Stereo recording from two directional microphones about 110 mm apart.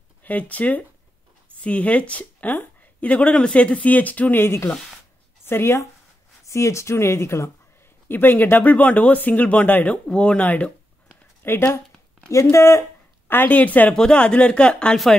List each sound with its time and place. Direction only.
0.2 s speech: 15° left (ahead or behind)